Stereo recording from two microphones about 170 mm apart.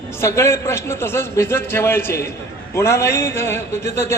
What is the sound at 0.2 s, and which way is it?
A man's voice, 15° left (ahead or behind).